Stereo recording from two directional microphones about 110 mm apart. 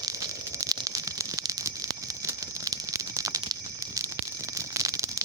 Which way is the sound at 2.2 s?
30° right (ahead or behind).